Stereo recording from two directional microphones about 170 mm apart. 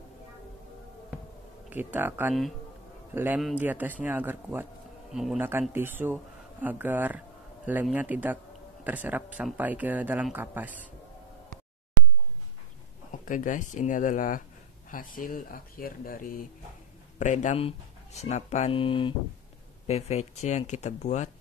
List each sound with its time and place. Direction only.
1.7 s speech: 10° right (ahead or behind)
13.2 s speech: 50° left (ahead or behind)
17.2 s speech: 45° left (ahead or behind)
18.8 s speech: 30° left (ahead or behind)